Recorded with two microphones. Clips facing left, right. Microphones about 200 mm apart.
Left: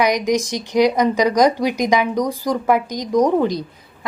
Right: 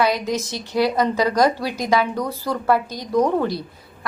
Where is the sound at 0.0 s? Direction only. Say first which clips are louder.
Left 3 dB; 15° left (ahead or behind).